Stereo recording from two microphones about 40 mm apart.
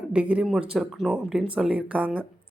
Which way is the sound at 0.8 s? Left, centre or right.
Centre.